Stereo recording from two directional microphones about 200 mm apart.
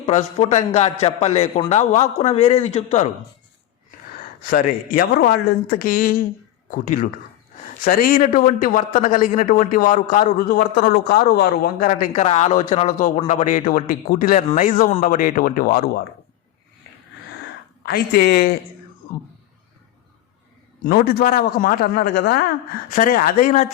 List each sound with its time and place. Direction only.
0.0 s speech: 35° left (ahead or behind)
4.2 s a man's voice: 45° left (ahead or behind)
17.8 s a man's voice: 50° left (ahead or behind)
20.8 s a man's voice: 50° left (ahead or behind)